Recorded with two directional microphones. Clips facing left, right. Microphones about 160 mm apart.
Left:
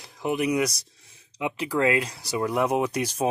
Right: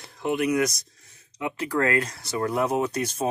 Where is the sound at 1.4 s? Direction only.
15° left (ahead or behind).